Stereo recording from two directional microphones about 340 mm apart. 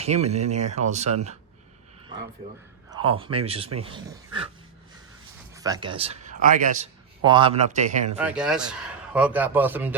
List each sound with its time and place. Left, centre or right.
0.0 s speech: centre
2.9 s speech: centre
5.5 s a man's voice: centre
8.2 s a man's voice: centre